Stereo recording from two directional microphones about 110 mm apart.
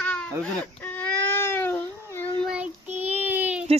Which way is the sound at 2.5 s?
15° right (ahead or behind).